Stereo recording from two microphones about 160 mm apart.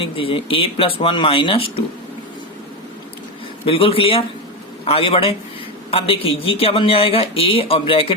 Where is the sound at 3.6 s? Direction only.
35° left (ahead or behind).